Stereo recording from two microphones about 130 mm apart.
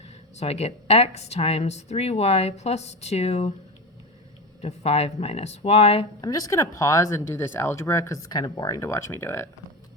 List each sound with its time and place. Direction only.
0.0 s speech: 55° left (ahead or behind)
4.6 s speech: 55° left (ahead or behind)
6.2 s speech: 30° left (ahead or behind)